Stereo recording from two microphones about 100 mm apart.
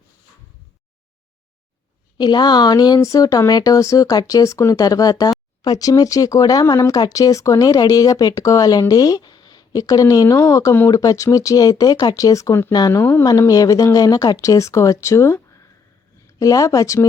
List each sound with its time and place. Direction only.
2.1 s speech: 45° left (ahead or behind)
12.9 s speech: 20° left (ahead or behind)
13.5 s speech: 40° left (ahead or behind)
16.4 s speech: 35° left (ahead or behind)